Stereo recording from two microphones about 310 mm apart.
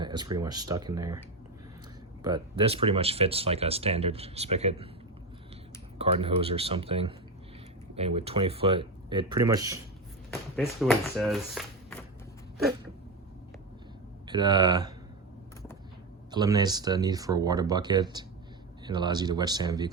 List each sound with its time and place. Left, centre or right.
0.0 s speech: centre
2.2 s speech: centre
6.0 s speech: centre
10.6 s speech: centre
14.3 s speech: centre
16.3 s speech: centre